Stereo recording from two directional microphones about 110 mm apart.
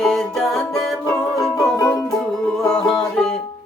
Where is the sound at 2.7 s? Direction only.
5° left (ahead or behind).